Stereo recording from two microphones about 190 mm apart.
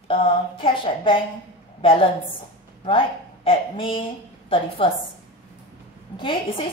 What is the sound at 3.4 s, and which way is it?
A woman's voice, 30° left (ahead or behind).